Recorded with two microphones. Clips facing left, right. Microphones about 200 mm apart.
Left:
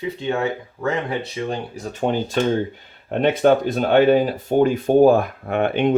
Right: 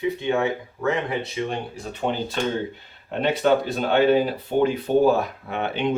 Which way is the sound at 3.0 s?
50° left (ahead or behind).